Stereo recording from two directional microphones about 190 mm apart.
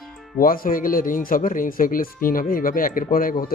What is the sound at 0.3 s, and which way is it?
Speech, 50° left (ahead or behind).